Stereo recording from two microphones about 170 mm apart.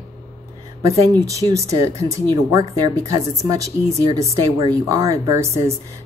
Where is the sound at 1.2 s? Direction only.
20° right (ahead or behind).